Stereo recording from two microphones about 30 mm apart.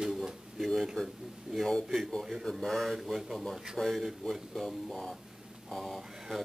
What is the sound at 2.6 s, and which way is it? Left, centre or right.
Speech, centre.